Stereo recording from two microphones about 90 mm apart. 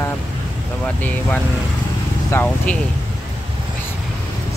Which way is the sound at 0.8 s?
15° left (ahead or behind).